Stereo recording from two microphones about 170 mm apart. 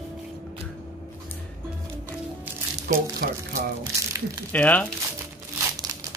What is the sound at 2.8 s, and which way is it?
Speech, 55° right (ahead or behind).